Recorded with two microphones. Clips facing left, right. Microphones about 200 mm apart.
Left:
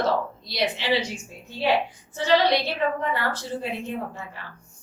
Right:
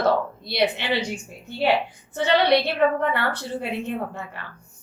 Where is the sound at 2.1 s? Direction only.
60° right (ahead or behind).